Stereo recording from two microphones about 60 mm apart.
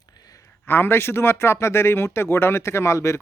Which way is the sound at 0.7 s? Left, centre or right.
Left.